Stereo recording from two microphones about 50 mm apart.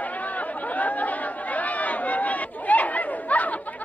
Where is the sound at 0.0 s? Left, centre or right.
Left.